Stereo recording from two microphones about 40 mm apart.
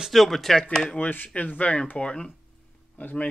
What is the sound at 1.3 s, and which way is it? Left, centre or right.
Speech, left.